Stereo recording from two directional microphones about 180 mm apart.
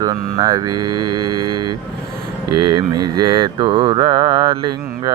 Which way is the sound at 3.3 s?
25° right (ahead or behind).